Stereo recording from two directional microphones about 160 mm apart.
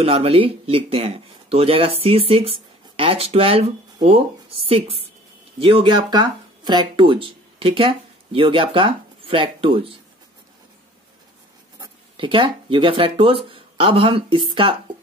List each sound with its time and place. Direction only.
0.0 s speech: 35° right (ahead or behind)
11.8 s speech: 30° right (ahead or behind)